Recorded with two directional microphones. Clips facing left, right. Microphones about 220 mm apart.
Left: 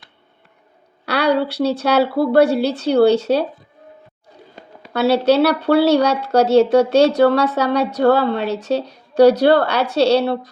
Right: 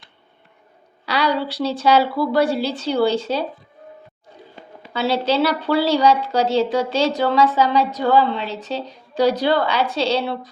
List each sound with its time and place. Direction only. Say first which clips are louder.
1.0 s a woman's voice: left 4 dB; 65° left (ahead or behind)
4.9 s speech: left 5 dB; 65° left (ahead or behind)